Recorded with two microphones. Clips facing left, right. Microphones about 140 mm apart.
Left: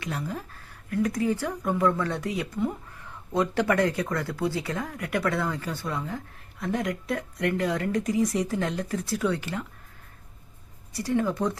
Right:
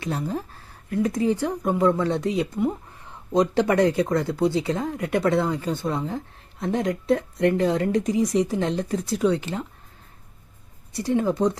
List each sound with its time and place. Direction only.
0.0 s speech: 30° right (ahead or behind)
10.9 s speech: 25° right (ahead or behind)